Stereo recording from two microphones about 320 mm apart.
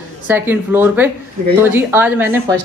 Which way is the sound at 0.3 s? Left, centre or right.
Centre.